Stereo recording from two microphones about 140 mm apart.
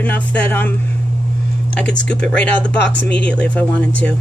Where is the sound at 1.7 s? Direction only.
10° left (ahead or behind).